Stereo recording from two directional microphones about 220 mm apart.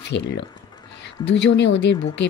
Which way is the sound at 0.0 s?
50° left (ahead or behind).